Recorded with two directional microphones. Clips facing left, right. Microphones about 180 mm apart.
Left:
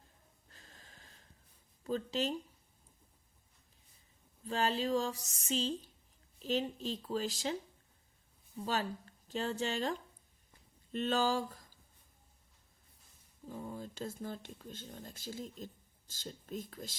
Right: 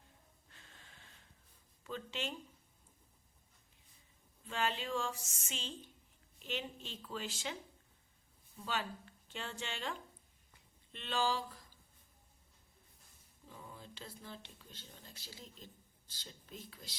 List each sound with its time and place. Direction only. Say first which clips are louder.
0.5 s wheeze: left 2 dB; 40° left (ahead or behind)
1.8 s speech: left 8 dB; 40° left (ahead or behind)
4.4 s speech: left 5 dB; 35° left (ahead or behind)
8.6 s speech: left 5 dB; 40° left (ahead or behind)
13.4 s speech: left 10 dB; 45° left (ahead or behind)